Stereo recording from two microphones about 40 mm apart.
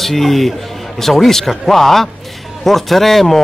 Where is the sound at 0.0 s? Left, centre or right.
Centre.